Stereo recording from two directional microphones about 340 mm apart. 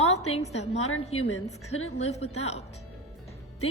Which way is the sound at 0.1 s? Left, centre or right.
Centre.